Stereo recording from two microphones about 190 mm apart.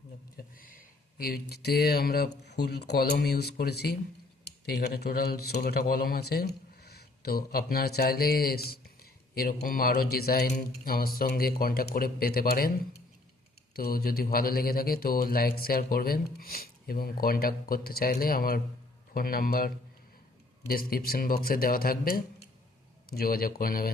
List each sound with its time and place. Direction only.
0.3 s a sound: 50° left (ahead or behind)
1.2 s speech: 55° left (ahead or behind)
13.7 s speech: 50° left (ahead or behind)